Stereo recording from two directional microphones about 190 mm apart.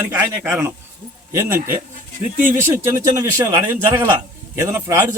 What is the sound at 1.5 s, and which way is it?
Speech, 45° right (ahead or behind).